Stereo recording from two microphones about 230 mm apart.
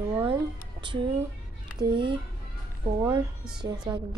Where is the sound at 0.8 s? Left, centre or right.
Right.